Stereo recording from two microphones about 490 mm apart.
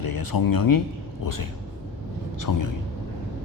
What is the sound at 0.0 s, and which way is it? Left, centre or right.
Speech, left.